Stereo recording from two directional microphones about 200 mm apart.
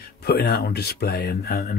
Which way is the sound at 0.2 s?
50° left (ahead or behind).